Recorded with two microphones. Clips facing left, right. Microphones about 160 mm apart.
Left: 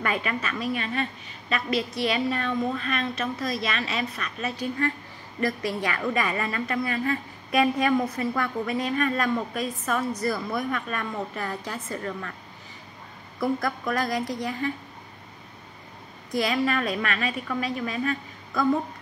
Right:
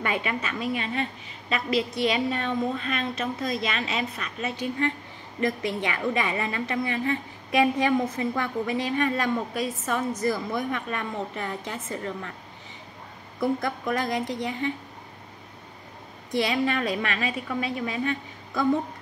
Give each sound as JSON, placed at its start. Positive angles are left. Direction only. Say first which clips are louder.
{"t": 0.0, "sound": "a woman's voice", "louder": "even", "side_deg": -25}
{"t": 13.6, "sound": "a woman's voice", "louder": "even", "side_deg": -25}
{"t": 16.3, "sound": "a woman's voice", "louder": "even", "side_deg": -25}